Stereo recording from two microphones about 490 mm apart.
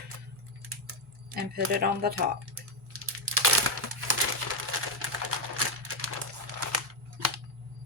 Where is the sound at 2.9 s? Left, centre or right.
Right.